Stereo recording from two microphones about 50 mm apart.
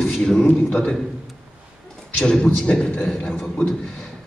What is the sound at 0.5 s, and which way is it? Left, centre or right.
Speech, left.